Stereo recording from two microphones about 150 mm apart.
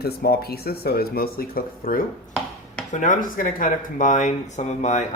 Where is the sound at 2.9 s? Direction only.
60° left (ahead or behind).